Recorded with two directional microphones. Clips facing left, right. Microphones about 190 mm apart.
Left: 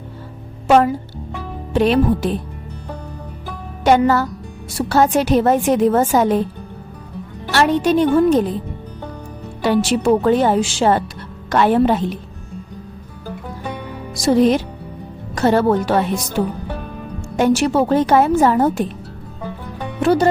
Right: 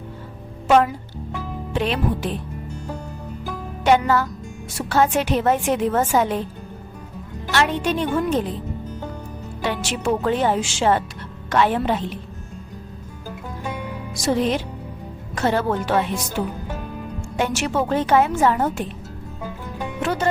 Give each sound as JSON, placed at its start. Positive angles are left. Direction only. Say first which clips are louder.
{"t": 1.7, "sound": "a woman's voice", "louder": "left 8 dB", "side_deg": 40}
{"t": 3.8, "sound": "a woman's voice", "louder": "left 4 dB", "side_deg": 40}
{"t": 7.5, "sound": "a woman's voice", "louder": "left 6 dB", "side_deg": 40}
{"t": 9.6, "sound": "a woman's voice", "louder": "left 9 dB", "side_deg": 40}
{"t": 14.2, "sound": "a woman's voice", "louder": "left 7 dB", "side_deg": 35}
{"t": 17.3, "sound": "a woman's voice", "louder": "left 7 dB", "side_deg": 40}
{"t": 20.0, "sound": "speech", "louder": "left 9 dB", "side_deg": 35}